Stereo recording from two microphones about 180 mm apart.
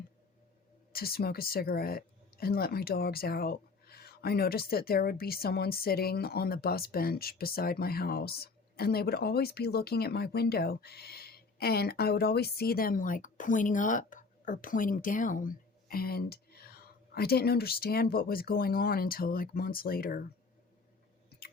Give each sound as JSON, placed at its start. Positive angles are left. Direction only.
{"t": 0.9, "sound": "speech", "side_deg": 60}
{"t": 21.2, "sound": "chewing", "side_deg": 60}